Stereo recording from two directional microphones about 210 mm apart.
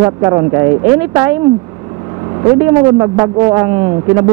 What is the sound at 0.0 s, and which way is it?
Speech, 20° right (ahead or behind).